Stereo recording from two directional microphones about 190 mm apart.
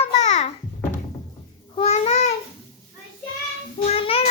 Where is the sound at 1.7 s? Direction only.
35° left (ahead or behind).